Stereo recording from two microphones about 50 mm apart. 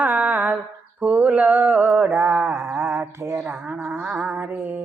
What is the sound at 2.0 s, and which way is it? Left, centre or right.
Mantra, right.